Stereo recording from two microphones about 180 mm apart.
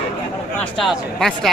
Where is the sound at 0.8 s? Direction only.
Centre (ahead or behind).